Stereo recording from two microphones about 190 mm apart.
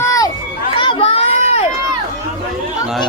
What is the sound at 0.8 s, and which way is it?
Children playing, 25° left (ahead or behind).